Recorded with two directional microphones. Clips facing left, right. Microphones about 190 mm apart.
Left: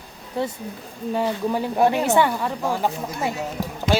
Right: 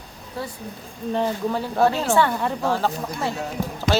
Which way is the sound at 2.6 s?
15° left (ahead or behind).